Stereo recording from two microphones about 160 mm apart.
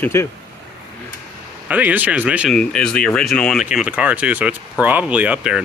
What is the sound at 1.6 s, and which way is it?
Speech, 10° right (ahead or behind).